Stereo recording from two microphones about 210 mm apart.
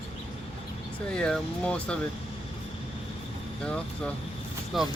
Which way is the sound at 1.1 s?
5° left (ahead or behind).